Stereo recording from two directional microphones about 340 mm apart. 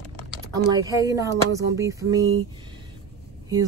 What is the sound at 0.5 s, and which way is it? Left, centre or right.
A woman's voice, centre.